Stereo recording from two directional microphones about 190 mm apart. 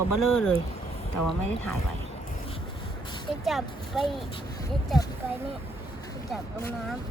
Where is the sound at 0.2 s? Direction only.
Centre (ahead or behind).